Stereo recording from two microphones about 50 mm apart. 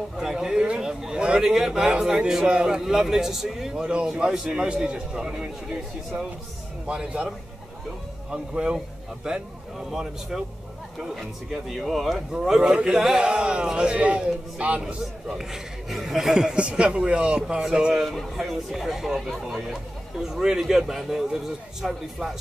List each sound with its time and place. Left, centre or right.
0.2 s a sound: centre
1.2 s a man's voice: centre
8.3 s a man's voice: centre
11.8 s a man's voice: centre; by 15.0 s right
15.2 s a man's voice: centre
18.0 s a man's voice: centre